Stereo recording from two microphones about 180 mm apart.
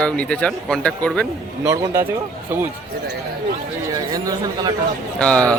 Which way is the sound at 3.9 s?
20° right (ahead or behind).